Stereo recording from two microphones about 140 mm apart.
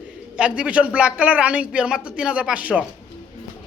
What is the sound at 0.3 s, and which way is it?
Speech, 10° right (ahead or behind).